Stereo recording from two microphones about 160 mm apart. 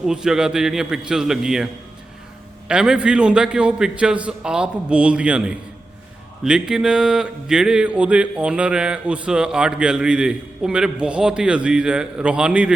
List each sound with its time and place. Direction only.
0.0 s speech: 5° right (ahead or behind)